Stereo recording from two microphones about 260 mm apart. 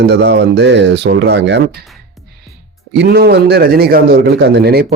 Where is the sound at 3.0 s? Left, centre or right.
Right.